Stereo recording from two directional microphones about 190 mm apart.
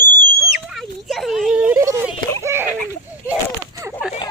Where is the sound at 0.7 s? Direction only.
Centre (ahead or behind).